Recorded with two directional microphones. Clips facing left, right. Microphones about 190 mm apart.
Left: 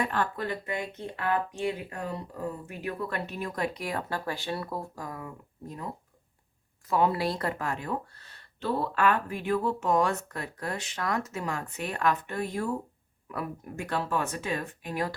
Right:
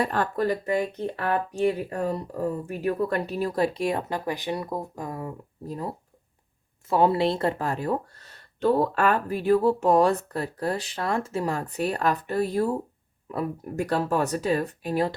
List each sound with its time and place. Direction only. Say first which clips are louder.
0.0 s speech: right 5 dB; 45° right (ahead or behind)
6.9 s speech: right 5 dB; 30° right (ahead or behind)